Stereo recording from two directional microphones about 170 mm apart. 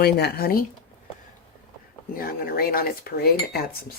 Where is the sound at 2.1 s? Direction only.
60° left (ahead or behind).